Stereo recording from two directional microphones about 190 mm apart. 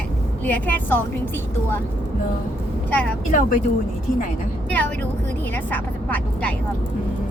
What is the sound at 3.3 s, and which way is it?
Speech, 45° left (ahead or behind).